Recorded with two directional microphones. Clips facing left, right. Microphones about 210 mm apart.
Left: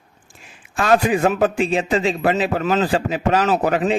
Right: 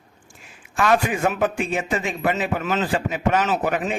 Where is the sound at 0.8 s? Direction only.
30° left (ahead or behind).